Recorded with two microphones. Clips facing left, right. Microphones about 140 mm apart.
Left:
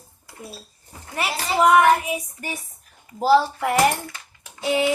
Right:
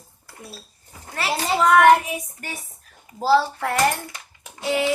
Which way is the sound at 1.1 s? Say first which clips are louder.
Even; 15° left (ahead or behind).